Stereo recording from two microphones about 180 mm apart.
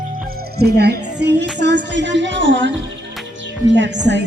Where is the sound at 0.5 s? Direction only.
65° right (ahead or behind); by 2.7 s 90° right.